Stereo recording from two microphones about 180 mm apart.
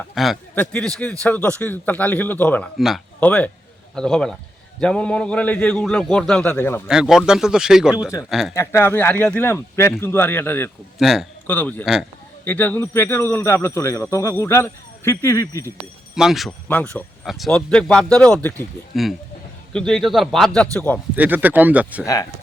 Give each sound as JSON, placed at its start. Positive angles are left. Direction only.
{"t": 0.1, "sound": "a man's voice", "side_deg": 0}
{"t": 6.8, "sound": "speech", "side_deg": -5}
{"t": 8.5, "sound": "speech", "side_deg": 15}
{"t": 10.9, "sound": "speech", "side_deg": 0}
{"t": 11.4, "sound": "speech", "side_deg": 10}
{"t": 16.1, "sound": "speech", "side_deg": 0}
{"t": 21.2, "sound": "speech", "side_deg": -10}
{"t": 22.0, "sound": "speech", "side_deg": 20}